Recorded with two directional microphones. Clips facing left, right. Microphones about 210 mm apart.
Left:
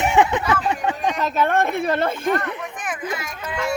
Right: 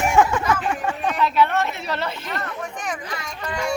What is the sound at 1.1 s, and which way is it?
A woman's voice, 45° left (ahead or behind).